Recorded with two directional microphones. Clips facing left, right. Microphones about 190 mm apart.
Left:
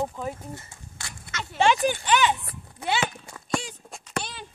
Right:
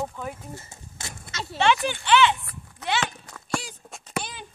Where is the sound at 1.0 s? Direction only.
20° right (ahead or behind).